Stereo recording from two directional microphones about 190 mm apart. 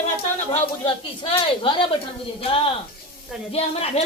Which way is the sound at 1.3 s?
25° left (ahead or behind).